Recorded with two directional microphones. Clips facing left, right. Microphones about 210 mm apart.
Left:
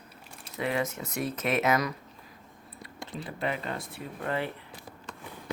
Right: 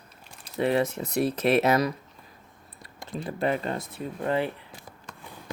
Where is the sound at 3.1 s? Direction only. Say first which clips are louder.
Right 6 dB; 45° right (ahead or behind).